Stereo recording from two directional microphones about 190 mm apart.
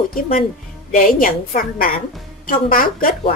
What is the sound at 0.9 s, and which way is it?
A woman's voice, 45° left (ahead or behind).